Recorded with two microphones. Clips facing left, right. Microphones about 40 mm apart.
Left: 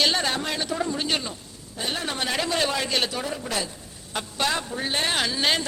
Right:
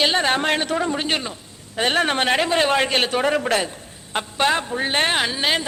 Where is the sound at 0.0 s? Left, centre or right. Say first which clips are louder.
Right 4 dB; right.